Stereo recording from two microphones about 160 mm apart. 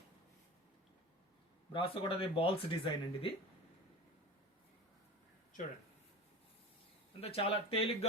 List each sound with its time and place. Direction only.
1.7 s speech: 35° left (ahead or behind)
7.2 s speech: 40° left (ahead or behind)